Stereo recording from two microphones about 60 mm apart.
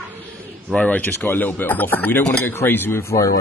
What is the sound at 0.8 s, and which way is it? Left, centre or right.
Speech, left.